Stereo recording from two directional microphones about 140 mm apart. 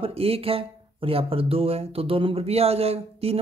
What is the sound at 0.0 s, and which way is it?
Speech, 45° right (ahead or behind).